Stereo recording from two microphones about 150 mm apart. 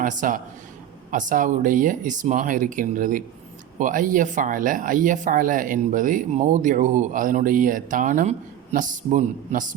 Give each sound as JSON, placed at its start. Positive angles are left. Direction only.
{"t": 0.0, "sound": "speech", "side_deg": -60}